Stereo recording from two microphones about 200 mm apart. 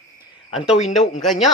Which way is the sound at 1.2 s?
Centre (ahead or behind).